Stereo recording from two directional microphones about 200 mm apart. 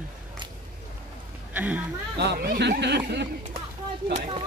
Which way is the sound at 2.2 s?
55° right (ahead or behind).